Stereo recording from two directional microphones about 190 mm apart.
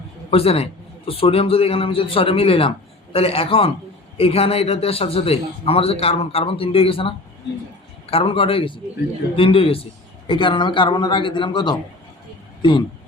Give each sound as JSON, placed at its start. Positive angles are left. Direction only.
{"t": 0.3, "sound": "a man's voice", "side_deg": 30}
{"t": 8.1, "sound": "a man's voice", "side_deg": 30}